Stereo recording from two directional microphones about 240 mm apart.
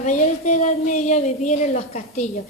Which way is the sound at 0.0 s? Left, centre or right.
Left.